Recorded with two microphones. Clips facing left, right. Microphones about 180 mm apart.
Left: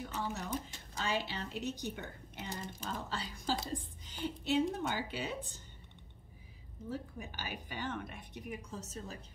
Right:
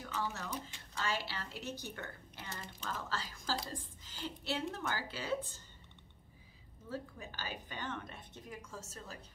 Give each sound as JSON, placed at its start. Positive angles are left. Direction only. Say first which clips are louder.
{"t": 0.1, "sound": "a woman's voice", "louder": "even", "side_deg": 20}
{"t": 6.9, "sound": "a woman's voice", "louder": "left 2 dB", "side_deg": 15}